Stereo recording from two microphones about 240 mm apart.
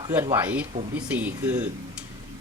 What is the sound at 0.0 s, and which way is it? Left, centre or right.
Speech, centre.